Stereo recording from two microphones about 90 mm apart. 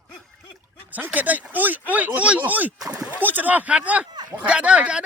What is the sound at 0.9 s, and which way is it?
Speech, 20° right (ahead or behind).